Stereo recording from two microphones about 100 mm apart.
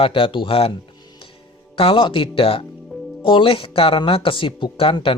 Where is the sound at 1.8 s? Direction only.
60° left (ahead or behind).